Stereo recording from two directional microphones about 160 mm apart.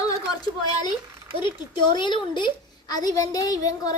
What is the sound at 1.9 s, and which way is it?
A woman's voice, 30° left (ahead or behind).